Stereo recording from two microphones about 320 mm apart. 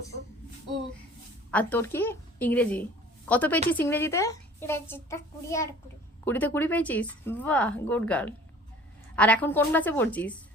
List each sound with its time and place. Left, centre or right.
1.5 s a child's voice: centre